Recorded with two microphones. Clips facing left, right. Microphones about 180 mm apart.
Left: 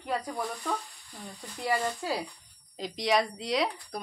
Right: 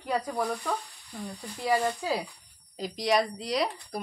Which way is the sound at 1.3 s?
Centre (ahead or behind).